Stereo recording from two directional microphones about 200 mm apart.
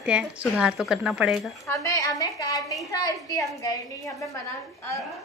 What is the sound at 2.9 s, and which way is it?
Speech, 20° left (ahead or behind).